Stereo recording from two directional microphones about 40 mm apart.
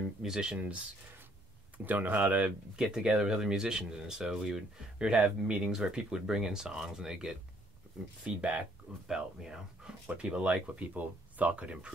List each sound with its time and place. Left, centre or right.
0.2 s speech: centre
0.5 s speech: right
1.9 s speech: right
2.7 s speech: centre
8.2 s speech: right
9.0 s speech: centre
10.8 s speech: right